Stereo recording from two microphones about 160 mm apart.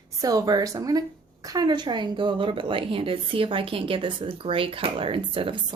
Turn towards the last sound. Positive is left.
turn(degrees=-30)  # may be behind; listen again after turning